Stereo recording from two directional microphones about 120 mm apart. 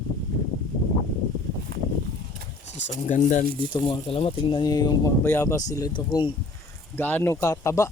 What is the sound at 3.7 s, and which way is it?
Speech, 45° left (ahead or behind).